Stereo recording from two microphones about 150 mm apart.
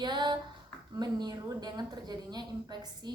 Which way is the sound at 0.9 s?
30° right (ahead or behind).